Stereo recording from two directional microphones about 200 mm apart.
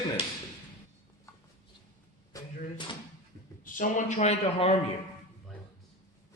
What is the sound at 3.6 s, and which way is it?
Speech, 40° left (ahead or behind).